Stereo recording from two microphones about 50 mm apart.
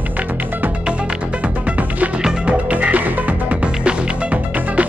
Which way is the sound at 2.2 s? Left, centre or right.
Right.